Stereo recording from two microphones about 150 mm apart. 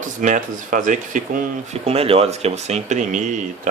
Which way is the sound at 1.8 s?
40° right (ahead or behind).